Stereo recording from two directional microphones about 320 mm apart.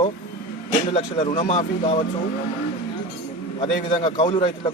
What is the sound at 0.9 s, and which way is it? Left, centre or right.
A man's voice, left.